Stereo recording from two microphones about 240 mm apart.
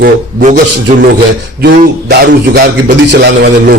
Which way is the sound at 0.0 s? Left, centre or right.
Right.